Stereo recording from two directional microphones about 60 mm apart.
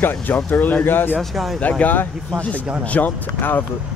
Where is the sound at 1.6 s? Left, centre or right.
Left.